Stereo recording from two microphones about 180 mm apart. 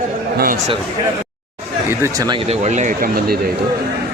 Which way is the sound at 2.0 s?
20° right (ahead or behind).